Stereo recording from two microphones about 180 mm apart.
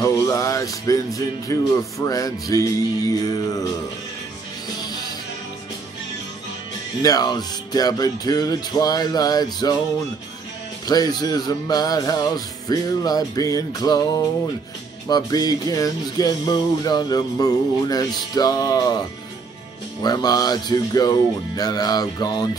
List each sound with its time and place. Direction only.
0.0 s music: 20° left (ahead or behind)
7.0 s music: 20° left (ahead or behind)
10.9 s music: 20° left (ahead or behind)